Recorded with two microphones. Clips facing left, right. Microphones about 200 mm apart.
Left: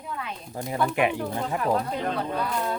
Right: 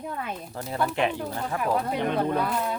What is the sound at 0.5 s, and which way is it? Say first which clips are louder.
Speech: left 2 dB; 15° left (ahead or behind).